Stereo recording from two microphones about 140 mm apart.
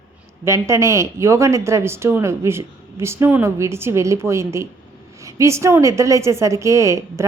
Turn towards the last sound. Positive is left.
turn(degrees=-20)  # may be behind; listen again after turning